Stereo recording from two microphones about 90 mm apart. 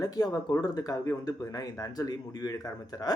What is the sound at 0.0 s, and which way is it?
Speech, 45° left (ahead or behind).